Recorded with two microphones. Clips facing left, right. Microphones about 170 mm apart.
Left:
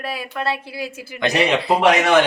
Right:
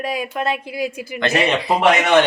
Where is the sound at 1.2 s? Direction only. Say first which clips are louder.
Even; 15° left (ahead or behind).